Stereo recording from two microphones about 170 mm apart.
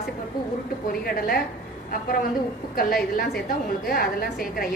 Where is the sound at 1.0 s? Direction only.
65° left (ahead or behind).